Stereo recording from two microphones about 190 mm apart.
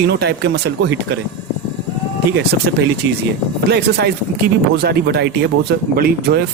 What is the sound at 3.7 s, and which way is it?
Speech, 60° right (ahead or behind).